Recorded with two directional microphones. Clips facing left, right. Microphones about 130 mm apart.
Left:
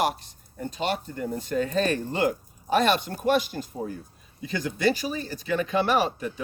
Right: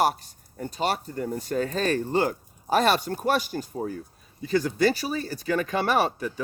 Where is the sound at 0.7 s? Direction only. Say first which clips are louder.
Right 1 dB; 40° right (ahead or behind).